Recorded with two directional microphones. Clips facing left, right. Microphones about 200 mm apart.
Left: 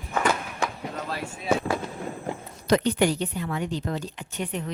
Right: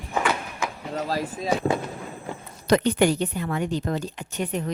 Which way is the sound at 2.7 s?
50° right (ahead or behind).